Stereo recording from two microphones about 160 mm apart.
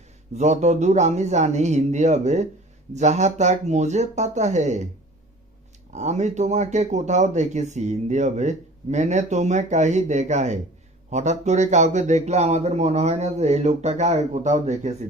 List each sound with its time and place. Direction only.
0.3 s speech: 45° right (ahead or behind)
5.9 s speech: 45° right (ahead or behind)